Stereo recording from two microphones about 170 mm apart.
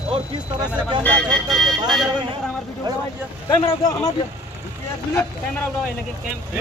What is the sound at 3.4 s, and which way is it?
Speech, 20° left (ahead or behind).